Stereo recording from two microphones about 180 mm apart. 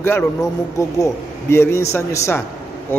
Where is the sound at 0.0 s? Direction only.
10° left (ahead or behind).